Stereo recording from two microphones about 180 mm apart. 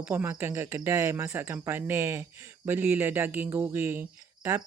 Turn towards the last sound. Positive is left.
turn(degrees=-15)  # may be behind; listen again after turning